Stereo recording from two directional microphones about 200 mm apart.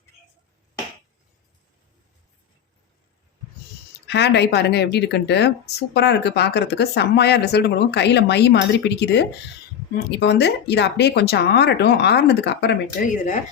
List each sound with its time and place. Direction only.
4.0 s speech: 60° left (ahead or behind)